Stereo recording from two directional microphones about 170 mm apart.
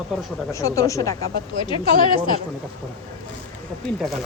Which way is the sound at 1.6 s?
30° left (ahead or behind).